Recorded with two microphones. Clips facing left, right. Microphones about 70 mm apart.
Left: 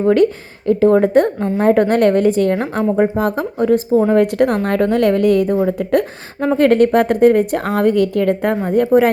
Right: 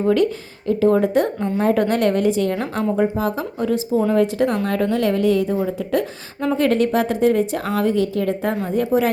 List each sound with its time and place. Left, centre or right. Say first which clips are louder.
0.7 s a woman's voice: left 5 dB; left
2.6 s a woman's voice: left 4 dB; left
3.2 s a woman's voice: left 5 dB; left
6.4 s a woman's voice: left 5 dB; left
6.7 s a woman's voice: left 7 dB; left